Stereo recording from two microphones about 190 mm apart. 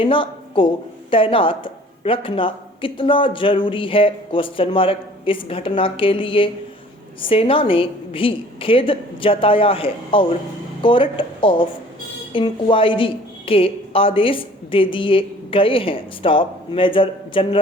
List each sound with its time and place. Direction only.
0.0 s a woman's voice: 25° left (ahead or behind)